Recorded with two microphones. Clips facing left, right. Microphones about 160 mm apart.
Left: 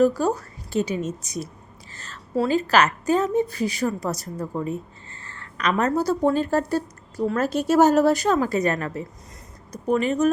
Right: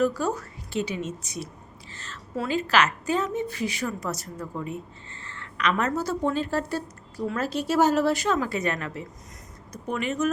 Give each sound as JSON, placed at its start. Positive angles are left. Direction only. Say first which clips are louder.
{"t": 0.0, "sound": "a woman's voice", "louder": "left 5 dB", "side_deg": 40}